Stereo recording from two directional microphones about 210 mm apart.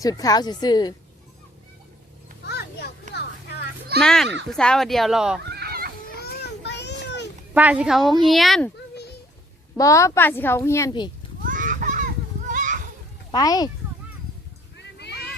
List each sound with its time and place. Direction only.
0.0 s speech: 15° left (ahead or behind)
2.5 s children playing: 50° left (ahead or behind)
4.0 s a woman's voice: 5° left (ahead or behind)
5.5 s children playing: 45° right (ahead or behind)
6.1 s a sound: 50° left (ahead or behind)
7.5 s a woman's voice: 5° right (ahead or behind)
9.7 s a child's voice: 15° left (ahead or behind)
11.4 s children playing: 40° right (ahead or behind)
13.3 s speech: 20° left (ahead or behind)
14.8 s a sound: 55° left (ahead or behind)